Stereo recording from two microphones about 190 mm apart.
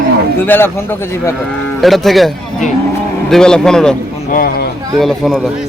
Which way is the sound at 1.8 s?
Centre (ahead or behind).